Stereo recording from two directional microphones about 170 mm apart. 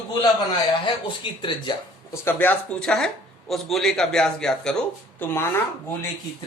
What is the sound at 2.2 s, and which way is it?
Speech, 10° left (ahead or behind).